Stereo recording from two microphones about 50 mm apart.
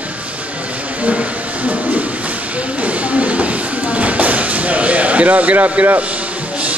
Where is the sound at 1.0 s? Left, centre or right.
Right.